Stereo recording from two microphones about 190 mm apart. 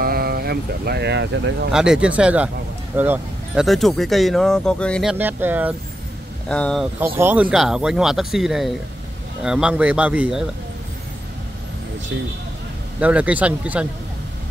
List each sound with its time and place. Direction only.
0.0 s speech: 55° right (ahead or behind)
1.7 s speech: 5° right (ahead or behind)
5.1 s speech: 10° right (ahead or behind)
6.5 s speech: 5° left (ahead or behind)
7.0 s speech: 10° right (ahead or behind)
13.0 s speech: 5° right (ahead or behind)